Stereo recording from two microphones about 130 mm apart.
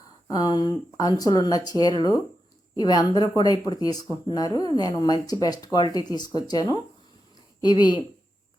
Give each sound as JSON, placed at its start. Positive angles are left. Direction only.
{"t": 0.3, "sound": "speech", "side_deg": 30}